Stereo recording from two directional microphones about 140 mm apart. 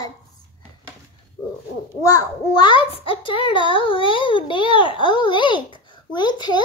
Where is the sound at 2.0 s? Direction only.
25° left (ahead or behind).